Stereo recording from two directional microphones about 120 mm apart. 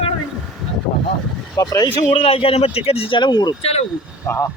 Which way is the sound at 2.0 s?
55° left (ahead or behind).